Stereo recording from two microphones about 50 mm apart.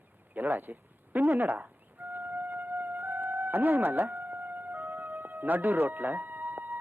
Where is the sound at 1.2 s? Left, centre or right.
Right.